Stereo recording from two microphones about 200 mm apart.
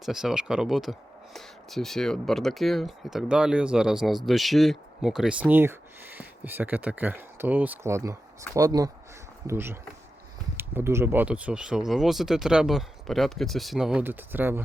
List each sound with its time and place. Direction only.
0.0 s speech: centre (ahead or behind)